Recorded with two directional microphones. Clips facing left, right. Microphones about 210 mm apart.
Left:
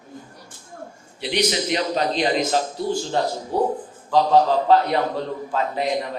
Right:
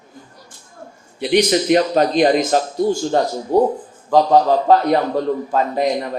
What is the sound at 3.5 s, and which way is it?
Speech, 50° right (ahead or behind).